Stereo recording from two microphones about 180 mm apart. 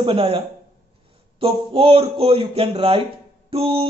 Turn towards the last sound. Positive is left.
turn(degrees=-30)  # may be behind; listen again after turning